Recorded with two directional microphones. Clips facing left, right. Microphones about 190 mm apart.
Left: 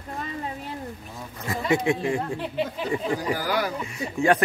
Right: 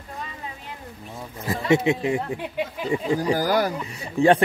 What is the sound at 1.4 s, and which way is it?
Speech, 25° right (ahead or behind).